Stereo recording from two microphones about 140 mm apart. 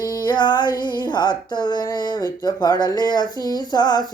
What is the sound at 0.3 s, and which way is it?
Female singing, 30° left (ahead or behind).